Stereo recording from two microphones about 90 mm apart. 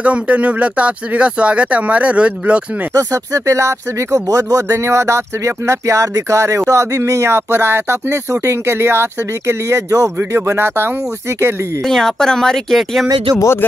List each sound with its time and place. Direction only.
0.0 s speech: 15° right (ahead or behind)
2.9 s speech: 40° right (ahead or behind)
11.9 s speech: 5° left (ahead or behind)
13.4 s speech: 30° left (ahead or behind)